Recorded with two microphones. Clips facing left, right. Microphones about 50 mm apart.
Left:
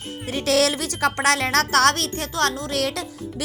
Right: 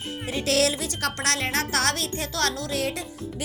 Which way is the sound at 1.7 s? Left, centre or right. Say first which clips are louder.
Left 7 dB; left.